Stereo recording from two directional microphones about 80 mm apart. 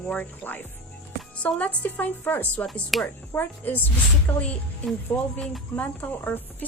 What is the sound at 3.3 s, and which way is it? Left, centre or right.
A woman's voice, left.